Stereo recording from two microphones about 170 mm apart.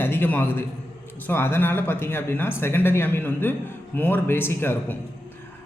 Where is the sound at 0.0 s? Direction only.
10° left (ahead or behind).